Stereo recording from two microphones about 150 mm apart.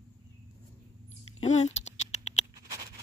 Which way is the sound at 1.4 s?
50° left (ahead or behind).